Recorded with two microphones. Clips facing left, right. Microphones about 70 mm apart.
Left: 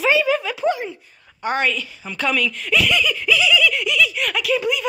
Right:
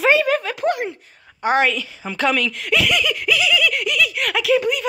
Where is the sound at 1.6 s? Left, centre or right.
Right.